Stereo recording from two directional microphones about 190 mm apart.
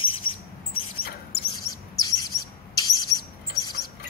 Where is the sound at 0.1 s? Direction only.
90° left.